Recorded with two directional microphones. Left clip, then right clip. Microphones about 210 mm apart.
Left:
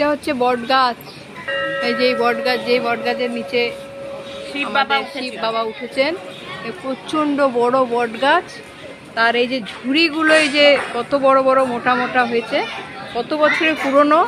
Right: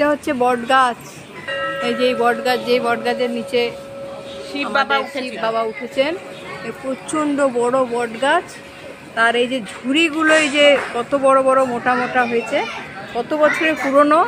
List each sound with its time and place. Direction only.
0.0 s speech: 10° right (ahead or behind)
4.7 s speech: 45° right (ahead or behind)
5.2 s speech: centre (ahead or behind)